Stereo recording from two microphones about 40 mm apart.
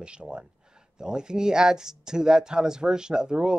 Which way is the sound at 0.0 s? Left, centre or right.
Right.